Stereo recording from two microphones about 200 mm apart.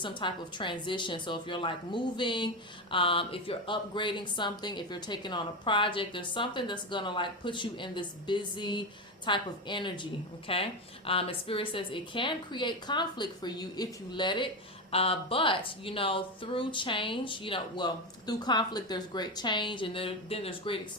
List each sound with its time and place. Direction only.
0.0 s speech: 25° left (ahead or behind)